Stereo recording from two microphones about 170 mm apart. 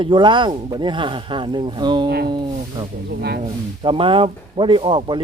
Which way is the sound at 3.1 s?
70° right (ahead or behind).